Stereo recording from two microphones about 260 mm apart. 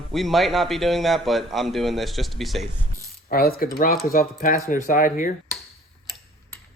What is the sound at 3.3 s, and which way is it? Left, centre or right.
Speech, left.